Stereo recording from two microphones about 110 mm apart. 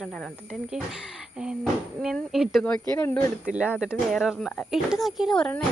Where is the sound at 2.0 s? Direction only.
5° right (ahead or behind).